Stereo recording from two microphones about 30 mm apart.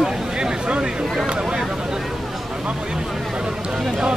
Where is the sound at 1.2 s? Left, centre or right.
Right.